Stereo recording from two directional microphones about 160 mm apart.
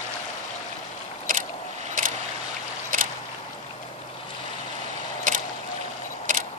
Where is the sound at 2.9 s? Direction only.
55° right (ahead or behind).